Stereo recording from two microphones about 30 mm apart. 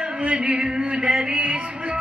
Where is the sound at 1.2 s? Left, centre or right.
Right.